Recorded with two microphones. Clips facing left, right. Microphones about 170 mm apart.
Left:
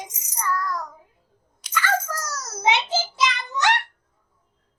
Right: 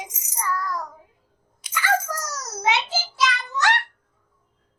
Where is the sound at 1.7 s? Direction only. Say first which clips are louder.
Right 1 dB; 10° right (ahead or behind).